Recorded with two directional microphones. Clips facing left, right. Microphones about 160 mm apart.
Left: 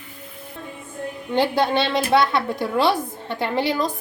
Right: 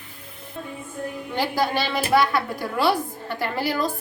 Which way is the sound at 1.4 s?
25° left (ahead or behind).